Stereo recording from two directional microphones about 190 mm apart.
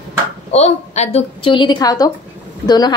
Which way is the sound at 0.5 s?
35° left (ahead or behind).